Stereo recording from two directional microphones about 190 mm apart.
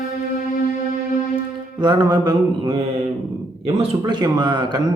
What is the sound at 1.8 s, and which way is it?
Speech, 20° right (ahead or behind).